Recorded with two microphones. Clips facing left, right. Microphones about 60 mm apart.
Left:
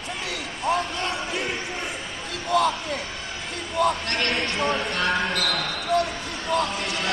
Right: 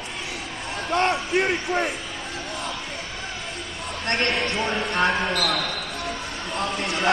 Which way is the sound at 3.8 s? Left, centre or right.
Left.